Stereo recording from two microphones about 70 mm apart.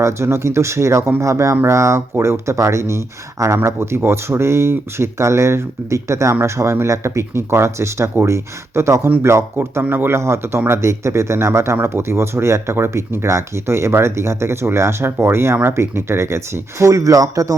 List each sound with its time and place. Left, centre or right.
0.0 s speech: right
16.9 s speech: right